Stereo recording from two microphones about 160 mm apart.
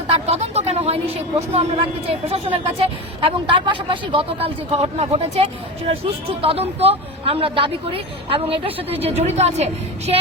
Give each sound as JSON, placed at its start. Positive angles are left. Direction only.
{"t": 0.3, "sound": "speech", "side_deg": -40}